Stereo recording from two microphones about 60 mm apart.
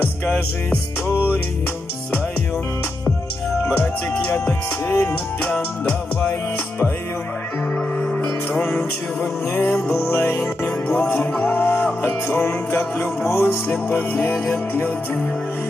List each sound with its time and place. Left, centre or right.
0.3 s music: left
3.8 s music: left
5.0 s music: left
8.6 s music: left
9.8 s music: left